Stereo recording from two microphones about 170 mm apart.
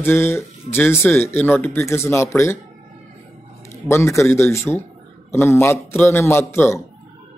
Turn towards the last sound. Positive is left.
turn(degrees=15)  # may be behind; listen again after turning